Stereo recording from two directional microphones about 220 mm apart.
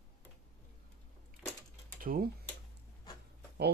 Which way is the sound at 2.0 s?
40° right (ahead or behind).